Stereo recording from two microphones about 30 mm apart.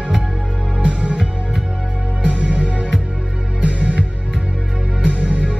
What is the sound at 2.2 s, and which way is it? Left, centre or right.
Music, right.